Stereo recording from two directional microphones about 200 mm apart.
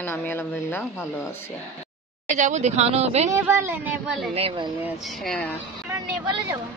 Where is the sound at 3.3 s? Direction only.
15° right (ahead or behind).